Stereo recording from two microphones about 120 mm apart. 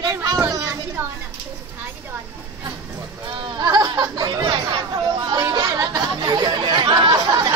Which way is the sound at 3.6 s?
35° right (ahead or behind).